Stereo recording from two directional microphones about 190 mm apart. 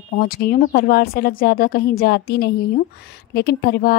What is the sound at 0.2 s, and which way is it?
A woman's voice, 50° left (ahead or behind).